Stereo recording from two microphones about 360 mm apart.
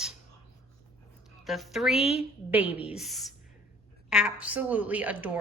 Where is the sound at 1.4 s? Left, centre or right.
Centre.